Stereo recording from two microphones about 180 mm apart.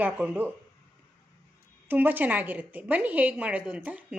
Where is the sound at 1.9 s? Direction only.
10° right (ahead or behind).